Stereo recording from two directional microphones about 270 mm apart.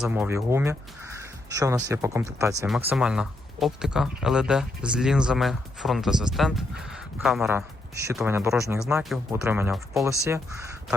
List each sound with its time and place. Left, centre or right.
0.0 s speech: centre